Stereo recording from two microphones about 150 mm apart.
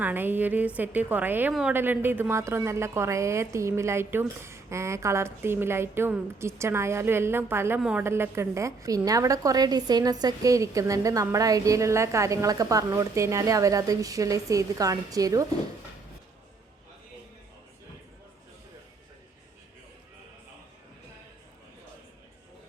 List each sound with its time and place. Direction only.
0.0 s a woman's voice: 15° right (ahead or behind)
7.8 s a woman's voice: 5° right (ahead or behind)
8.0 s a woman's voice: 15° right (ahead or behind)